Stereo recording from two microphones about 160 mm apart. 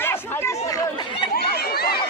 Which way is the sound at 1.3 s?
75° left (ahead or behind).